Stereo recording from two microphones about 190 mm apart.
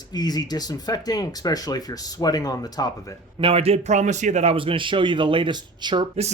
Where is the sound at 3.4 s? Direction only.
30° right (ahead or behind).